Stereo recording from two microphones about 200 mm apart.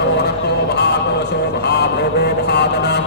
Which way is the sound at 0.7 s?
60° left (ahead or behind).